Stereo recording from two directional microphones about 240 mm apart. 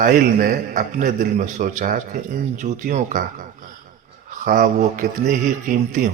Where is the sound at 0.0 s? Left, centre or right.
Right.